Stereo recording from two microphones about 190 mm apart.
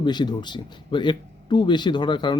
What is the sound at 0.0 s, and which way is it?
Speech, 25° left (ahead or behind).